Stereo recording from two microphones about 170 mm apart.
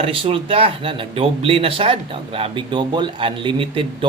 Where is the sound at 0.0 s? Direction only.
35° right (ahead or behind).